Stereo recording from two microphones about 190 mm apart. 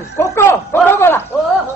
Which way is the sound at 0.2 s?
15° left (ahead or behind).